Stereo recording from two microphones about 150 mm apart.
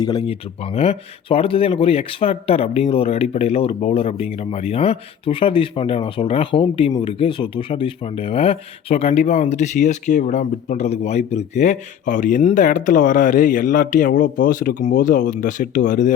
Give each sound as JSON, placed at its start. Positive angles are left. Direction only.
{"t": 0.0, "sound": "speech", "side_deg": 30}
{"t": 0.6, "sound": "speech", "side_deg": 40}